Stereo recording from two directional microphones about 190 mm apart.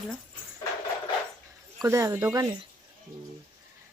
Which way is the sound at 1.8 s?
15° right (ahead or behind).